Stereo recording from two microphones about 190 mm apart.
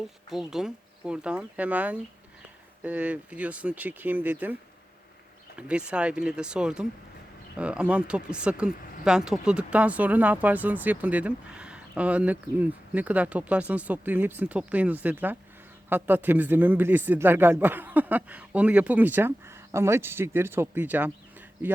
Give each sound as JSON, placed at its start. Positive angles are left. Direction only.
{"t": 0.3, "sound": "speech", "side_deg": 0}
{"t": 5.5, "sound": "speech", "side_deg": -5}